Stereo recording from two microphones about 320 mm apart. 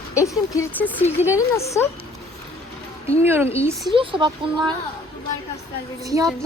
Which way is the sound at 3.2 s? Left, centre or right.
Centre.